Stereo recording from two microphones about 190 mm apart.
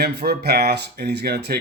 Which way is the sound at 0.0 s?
55° right (ahead or behind).